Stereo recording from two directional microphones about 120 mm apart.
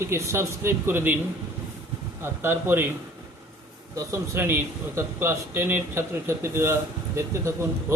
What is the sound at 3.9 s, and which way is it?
Speech, 25° right (ahead or behind).